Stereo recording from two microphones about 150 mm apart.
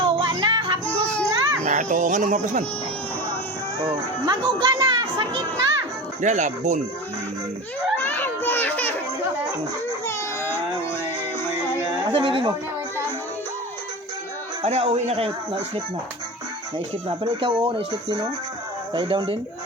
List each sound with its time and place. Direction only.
0.0 s music: 30° right (ahead or behind)
0.9 s child singing: 10° left (ahead or behind)
1.6 s speech: 55° right (ahead or behind)
3.8 s speech: 30° right (ahead or behind)
6.2 s a man's voice: 55° right (ahead or behind)
7.9 s children playing: 10° left (ahead or behind)
12.1 s speech: 35° right (ahead or behind)
14.6 s a man's voice: 45° right (ahead or behind)
16.7 s speech: 35° right (ahead or behind)